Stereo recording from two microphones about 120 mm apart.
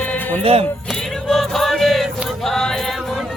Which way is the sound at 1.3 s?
Centre (ahead or behind).